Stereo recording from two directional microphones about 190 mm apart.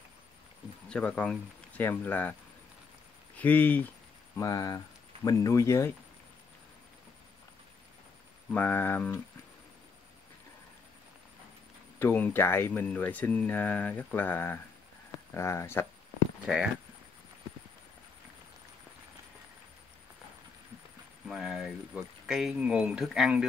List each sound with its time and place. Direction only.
0.8 s speech: 5° left (ahead or behind)
3.3 s speech: 10° left (ahead or behind)
8.5 s speech: 10° left (ahead or behind)
12.0 s speech: 10° left (ahead or behind)
16.4 s speech: 5° right (ahead or behind)
21.3 s speech: 5° right (ahead or behind)